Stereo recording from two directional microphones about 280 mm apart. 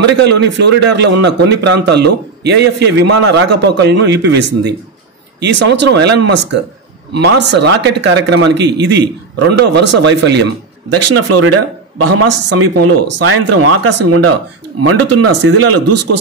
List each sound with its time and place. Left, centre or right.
0.0 s a man's voice: right
10.9 s speech: right